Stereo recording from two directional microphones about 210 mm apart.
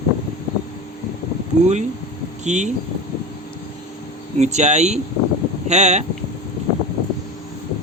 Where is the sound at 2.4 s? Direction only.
35° right (ahead or behind).